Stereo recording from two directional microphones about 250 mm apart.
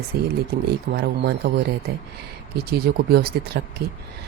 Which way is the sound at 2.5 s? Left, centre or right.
Right.